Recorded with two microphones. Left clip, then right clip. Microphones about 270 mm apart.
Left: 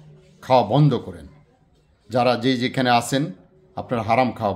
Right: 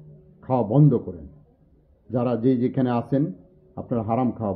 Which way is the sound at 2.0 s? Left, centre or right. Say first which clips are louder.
Left 4 dB; centre.